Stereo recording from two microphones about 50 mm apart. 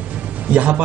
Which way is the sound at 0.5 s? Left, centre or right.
Right.